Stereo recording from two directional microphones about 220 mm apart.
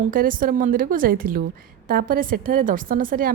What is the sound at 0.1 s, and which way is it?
A woman's voice, 40° right (ahead or behind).